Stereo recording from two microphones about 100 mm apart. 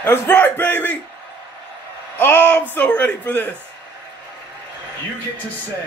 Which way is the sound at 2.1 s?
20° left (ahead or behind).